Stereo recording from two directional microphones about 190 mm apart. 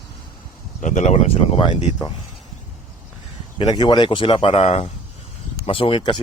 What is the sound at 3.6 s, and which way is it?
Speech, 20° left (ahead or behind).